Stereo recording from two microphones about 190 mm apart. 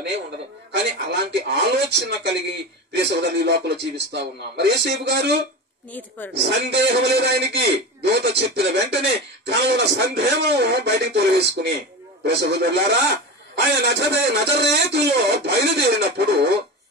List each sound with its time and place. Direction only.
0.7 s a man's voice: 65° right (ahead or behind)
5.9 s speech: 10° left (ahead or behind)
6.3 s a man's voice: 65° right (ahead or behind)